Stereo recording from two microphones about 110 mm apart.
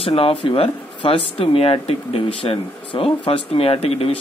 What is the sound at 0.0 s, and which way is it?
Speech, 60° left (ahead or behind).